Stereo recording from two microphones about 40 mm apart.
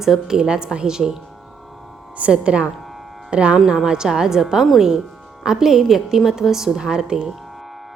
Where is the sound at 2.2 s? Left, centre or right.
Right.